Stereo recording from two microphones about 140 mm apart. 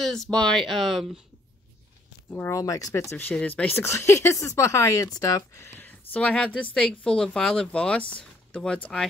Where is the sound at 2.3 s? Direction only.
15° left (ahead or behind).